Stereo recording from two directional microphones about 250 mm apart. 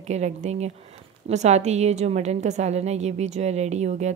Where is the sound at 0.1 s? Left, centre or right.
Right.